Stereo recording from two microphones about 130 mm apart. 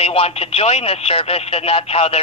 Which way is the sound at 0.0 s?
50° left (ahead or behind).